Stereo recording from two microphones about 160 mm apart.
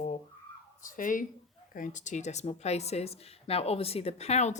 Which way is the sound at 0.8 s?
55° left (ahead or behind).